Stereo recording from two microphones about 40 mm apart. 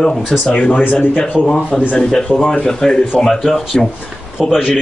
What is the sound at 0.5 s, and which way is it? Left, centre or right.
Speech, left.